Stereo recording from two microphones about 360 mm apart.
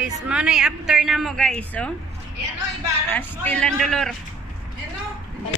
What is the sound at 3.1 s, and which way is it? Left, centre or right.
A woman's voice, centre.